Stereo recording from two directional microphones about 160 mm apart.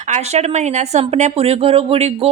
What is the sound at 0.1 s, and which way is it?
Speech, 45° right (ahead or behind).